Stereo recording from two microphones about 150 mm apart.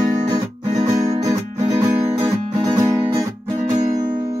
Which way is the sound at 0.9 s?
50° right (ahead or behind).